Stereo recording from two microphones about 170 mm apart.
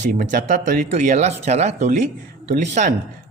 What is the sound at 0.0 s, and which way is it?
Speech, 50° right (ahead or behind).